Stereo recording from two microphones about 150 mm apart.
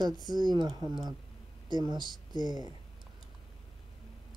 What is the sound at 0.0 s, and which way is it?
Speech, 30° right (ahead or behind).